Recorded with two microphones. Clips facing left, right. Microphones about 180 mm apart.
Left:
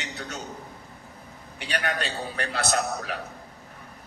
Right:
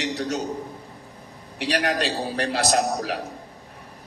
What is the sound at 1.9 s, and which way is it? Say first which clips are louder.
A man's voice: right 6 dB; 35° right (ahead or behind).